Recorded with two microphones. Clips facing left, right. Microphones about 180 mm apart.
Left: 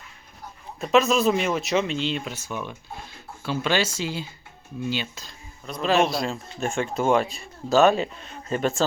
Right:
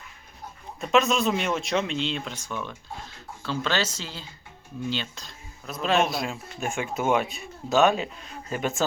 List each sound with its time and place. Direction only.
0.8 s speech: centre (ahead or behind)